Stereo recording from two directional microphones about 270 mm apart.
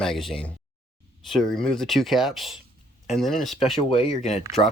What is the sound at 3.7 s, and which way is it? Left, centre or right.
Speech, centre.